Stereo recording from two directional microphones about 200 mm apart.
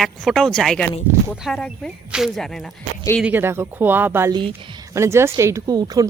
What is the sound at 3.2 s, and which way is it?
Speech, 10° right (ahead or behind).